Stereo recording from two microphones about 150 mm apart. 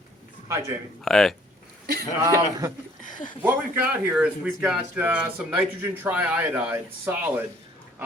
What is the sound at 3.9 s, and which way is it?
A man's voice, 10° right (ahead or behind).